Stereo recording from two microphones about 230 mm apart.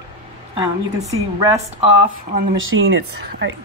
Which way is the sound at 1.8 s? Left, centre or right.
Right.